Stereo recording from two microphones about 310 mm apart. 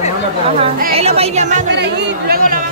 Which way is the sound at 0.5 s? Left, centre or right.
Centre.